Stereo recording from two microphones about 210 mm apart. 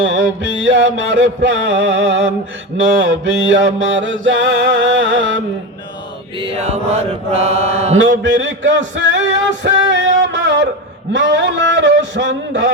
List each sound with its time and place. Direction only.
0.0 s mantra: 60° right (ahead or behind)
6.4 s mantra: 30° right (ahead or behind)
7.9 s mantra: 60° right (ahead or behind)
9.0 s music: 60° right (ahead or behind)
10.2 s a sound: 55° right (ahead or behind)
11.1 s mantra: 60° right (ahead or behind)